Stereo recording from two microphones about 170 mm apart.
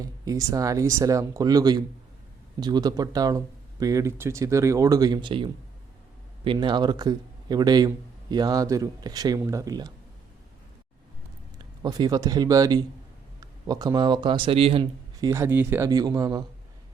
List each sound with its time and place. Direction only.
0.0 s speech: 20° right (ahead or behind)
11.8 s speech: 25° right (ahead or behind)
15.3 s speech: 15° right (ahead or behind)